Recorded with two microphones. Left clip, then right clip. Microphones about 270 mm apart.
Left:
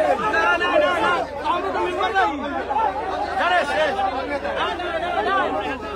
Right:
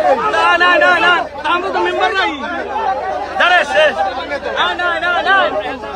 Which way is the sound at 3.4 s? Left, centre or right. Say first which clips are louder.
Right 9 dB; right.